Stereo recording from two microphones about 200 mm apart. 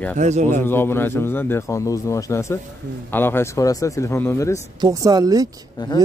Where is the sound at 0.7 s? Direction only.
10° left (ahead or behind).